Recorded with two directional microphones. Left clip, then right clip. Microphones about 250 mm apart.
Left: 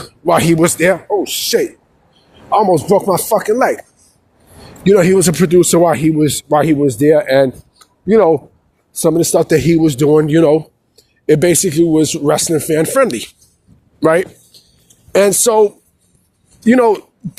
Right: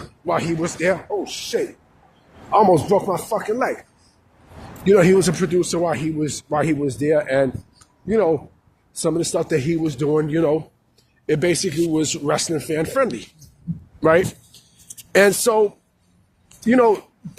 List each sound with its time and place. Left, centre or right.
0.3 s speech: left
4.8 s speech: left
15.1 s a woman's voice: centre
15.4 s speech: left